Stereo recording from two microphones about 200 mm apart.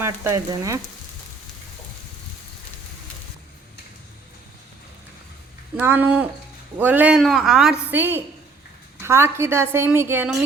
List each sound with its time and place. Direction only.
0.0 s a woman's voice: 15° right (ahead or behind)
5.7 s a woman's voice: 10° right (ahead or behind)